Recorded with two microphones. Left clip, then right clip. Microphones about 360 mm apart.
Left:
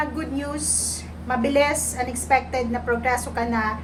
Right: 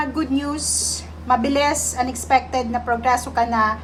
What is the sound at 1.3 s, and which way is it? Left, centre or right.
A woman's voice, centre.